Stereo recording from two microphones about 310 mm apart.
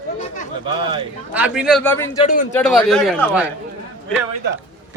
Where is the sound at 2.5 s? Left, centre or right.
Centre.